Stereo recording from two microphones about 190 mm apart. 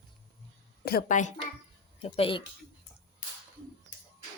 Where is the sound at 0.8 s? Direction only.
45° left (ahead or behind); by 2.4 s 30° left (ahead or behind).